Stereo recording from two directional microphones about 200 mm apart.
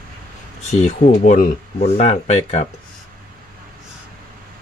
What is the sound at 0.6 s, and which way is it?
Speech, 35° left (ahead or behind).